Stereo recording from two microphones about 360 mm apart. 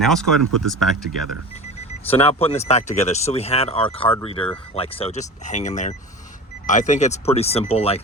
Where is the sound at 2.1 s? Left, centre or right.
Centre.